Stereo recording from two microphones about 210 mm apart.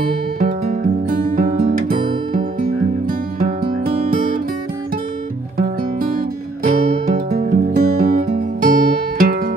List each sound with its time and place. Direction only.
0.7 s music: 40° right (ahead or behind)
3.1 s music: 40° right (ahead or behind)
7.2 s music: 40° right (ahead or behind)